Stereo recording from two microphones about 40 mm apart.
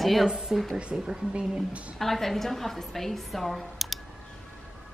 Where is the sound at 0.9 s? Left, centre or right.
Right.